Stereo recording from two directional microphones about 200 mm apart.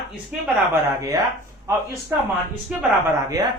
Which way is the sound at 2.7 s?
5° right (ahead or behind).